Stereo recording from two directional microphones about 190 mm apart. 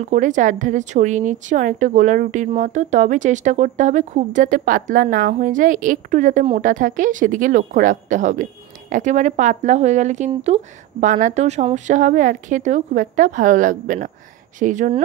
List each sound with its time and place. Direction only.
0.0 s a woman's voice: 40° right (ahead or behind)